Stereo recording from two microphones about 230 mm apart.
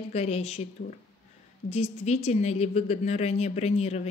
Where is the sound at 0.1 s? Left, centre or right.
Left.